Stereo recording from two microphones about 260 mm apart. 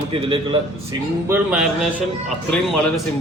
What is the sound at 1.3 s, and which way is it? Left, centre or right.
A man's voice, centre.